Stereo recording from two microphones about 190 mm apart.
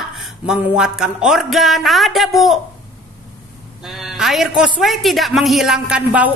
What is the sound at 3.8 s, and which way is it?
A woman's voice, centre (ahead or behind).